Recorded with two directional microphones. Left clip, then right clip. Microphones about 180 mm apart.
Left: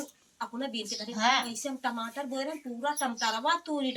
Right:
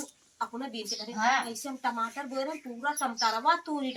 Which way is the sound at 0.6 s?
15° left (ahead or behind).